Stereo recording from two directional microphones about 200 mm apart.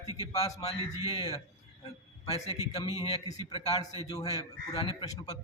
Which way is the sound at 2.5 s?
25° left (ahead or behind).